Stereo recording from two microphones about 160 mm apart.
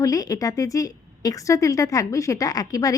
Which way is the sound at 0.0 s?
20° left (ahead or behind).